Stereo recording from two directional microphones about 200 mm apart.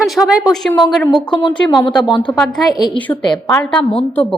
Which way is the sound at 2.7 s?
20° left (ahead or behind).